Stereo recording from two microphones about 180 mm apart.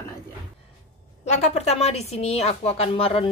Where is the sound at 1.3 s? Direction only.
40° left (ahead or behind).